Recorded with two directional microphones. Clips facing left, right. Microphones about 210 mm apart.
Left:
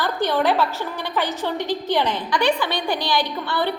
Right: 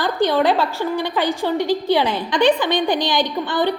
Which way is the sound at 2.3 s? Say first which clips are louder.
Right 6 dB; 20° right (ahead or behind).